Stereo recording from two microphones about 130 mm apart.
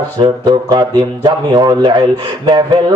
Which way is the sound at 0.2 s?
35° right (ahead or behind).